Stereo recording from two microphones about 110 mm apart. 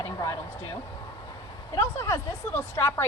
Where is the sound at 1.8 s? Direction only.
25° left (ahead or behind).